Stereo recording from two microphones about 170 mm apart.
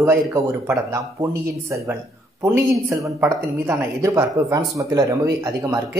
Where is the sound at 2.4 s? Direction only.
15° right (ahead or behind).